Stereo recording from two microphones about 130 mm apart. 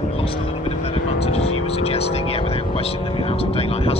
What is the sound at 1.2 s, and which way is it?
Speech, 50° left (ahead or behind).